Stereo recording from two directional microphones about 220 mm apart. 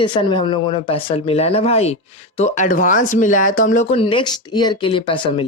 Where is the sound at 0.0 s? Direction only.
20° left (ahead or behind).